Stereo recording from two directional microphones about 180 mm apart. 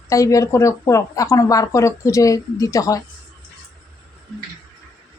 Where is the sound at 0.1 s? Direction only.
20° left (ahead or behind).